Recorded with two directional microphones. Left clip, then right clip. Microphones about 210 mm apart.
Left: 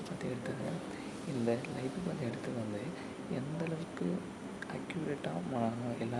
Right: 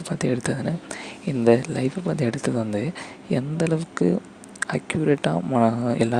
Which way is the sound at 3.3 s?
45° right (ahead or behind).